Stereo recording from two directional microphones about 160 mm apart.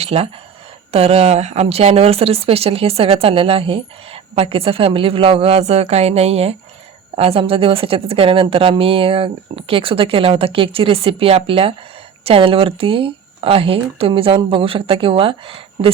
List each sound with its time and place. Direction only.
0.0 s a woman's voice: 40° right (ahead or behind)